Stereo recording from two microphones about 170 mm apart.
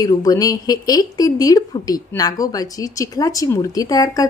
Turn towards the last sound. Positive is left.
turn(degrees=20)  # may be behind; listen again after turning